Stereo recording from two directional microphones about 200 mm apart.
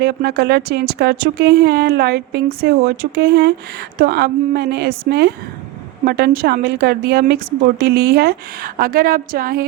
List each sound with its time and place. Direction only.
0.0 s a woman's voice: 55° right (ahead or behind)